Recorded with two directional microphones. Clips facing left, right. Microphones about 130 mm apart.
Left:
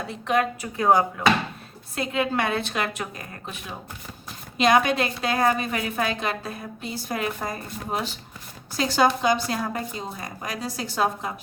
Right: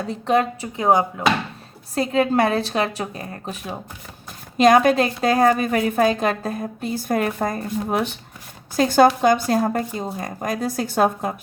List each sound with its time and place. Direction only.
0.1 s speech: 30° right (ahead or behind)
2.0 s a woman's voice: 40° right (ahead or behind); by 8.2 s 60° right (ahead or behind)
8.7 s a woman's voice: 50° right (ahead or behind)